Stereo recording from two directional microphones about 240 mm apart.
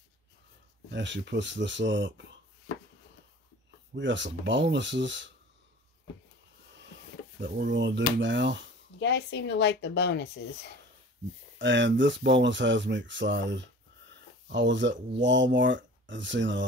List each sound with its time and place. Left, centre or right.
0.8 s speech: right
3.9 s speech: right
7.3 s speech: right
9.0 s speech: left
11.5 s speech: right
14.1 s a sound: right
15.1 s speech: right